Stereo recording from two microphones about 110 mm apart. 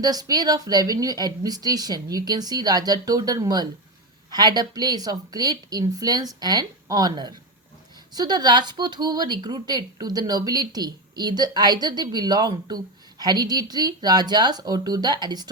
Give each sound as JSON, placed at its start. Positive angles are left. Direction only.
{"t": 0.0, "sound": "speech", "side_deg": -35}